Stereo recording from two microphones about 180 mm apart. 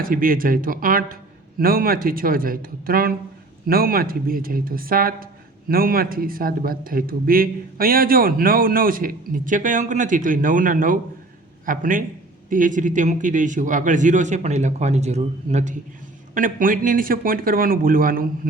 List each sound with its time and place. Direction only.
0.0 s speech: 50° right (ahead or behind)